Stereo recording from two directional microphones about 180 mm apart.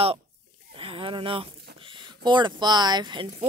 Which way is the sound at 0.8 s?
30° right (ahead or behind).